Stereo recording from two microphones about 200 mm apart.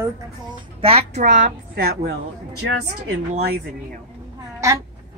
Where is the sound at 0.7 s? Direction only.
30° right (ahead or behind).